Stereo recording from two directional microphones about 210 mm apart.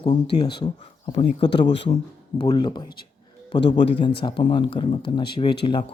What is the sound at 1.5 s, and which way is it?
Speech, 55° left (ahead or behind).